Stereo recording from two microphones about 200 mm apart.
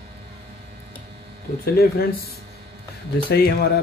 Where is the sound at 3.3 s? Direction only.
55° left (ahead or behind).